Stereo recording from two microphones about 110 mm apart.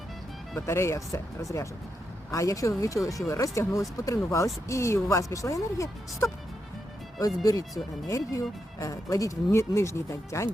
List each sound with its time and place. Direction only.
0.6 s speech: 25° left (ahead or behind)
8.0 s speech: 30° left (ahead or behind)